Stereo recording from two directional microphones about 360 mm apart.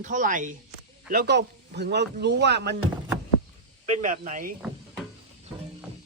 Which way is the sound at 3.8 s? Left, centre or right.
Right.